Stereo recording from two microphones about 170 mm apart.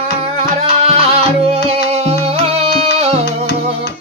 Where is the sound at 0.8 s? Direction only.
35° right (ahead or behind).